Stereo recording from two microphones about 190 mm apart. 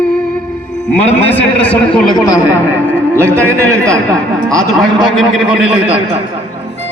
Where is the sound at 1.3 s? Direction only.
5° left (ahead or behind).